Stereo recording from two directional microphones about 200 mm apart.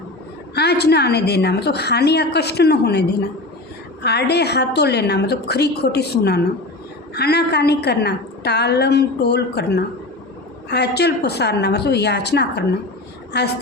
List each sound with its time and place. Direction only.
0.5 s a woman's voice: 55° left (ahead or behind)